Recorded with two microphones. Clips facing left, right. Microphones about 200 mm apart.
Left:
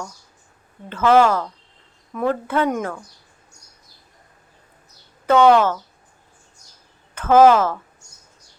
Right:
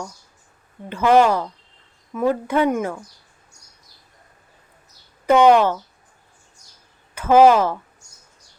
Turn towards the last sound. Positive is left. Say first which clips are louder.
# even
turn(degrees=-15)  # may be behind; listen again after turning